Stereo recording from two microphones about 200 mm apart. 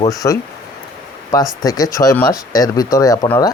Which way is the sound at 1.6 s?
20° left (ahead or behind).